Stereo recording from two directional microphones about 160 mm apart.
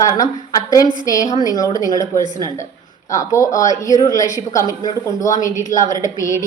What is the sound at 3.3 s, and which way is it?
A woman's voice, 20° left (ahead or behind).